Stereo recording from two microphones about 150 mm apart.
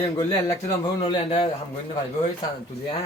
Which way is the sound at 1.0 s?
35° left (ahead or behind).